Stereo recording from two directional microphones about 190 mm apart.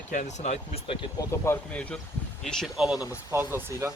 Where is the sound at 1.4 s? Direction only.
10° left (ahead or behind).